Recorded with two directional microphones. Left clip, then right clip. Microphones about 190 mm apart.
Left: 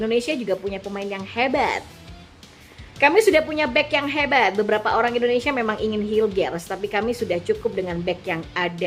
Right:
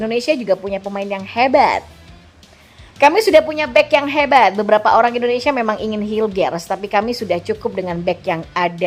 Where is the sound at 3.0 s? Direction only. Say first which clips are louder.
Right 5 dB; 25° right (ahead or behind).